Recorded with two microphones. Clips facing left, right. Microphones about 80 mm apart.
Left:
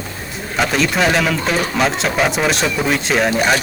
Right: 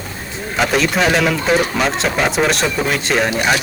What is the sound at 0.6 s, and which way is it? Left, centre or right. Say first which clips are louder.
Speech: right 1 dB; centre.